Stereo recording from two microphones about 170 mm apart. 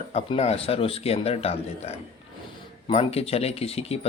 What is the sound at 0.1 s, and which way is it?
Speech, 35° left (ahead or behind).